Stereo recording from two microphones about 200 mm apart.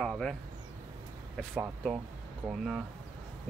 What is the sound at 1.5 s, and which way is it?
Speech, 5° right (ahead or behind).